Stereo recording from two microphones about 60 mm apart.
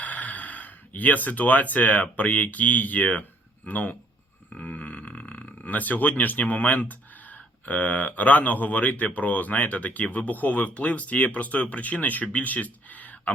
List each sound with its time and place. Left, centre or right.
0.0 s speech: left